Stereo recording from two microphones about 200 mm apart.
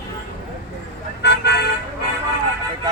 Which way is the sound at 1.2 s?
60° left (ahead or behind).